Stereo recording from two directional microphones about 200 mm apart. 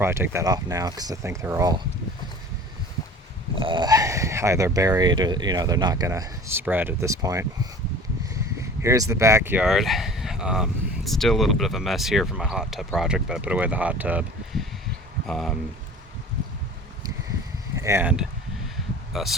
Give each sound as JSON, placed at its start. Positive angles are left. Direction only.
{"t": 0.0, "sound": "speech", "side_deg": -10}
{"t": 3.6, "sound": "speech", "side_deg": -25}
{"t": 8.8, "sound": "speech", "side_deg": -15}
{"t": 17.7, "sound": "speech", "side_deg": -15}